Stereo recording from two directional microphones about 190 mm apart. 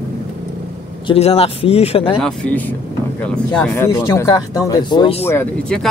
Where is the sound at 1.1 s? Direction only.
30° left (ahead or behind).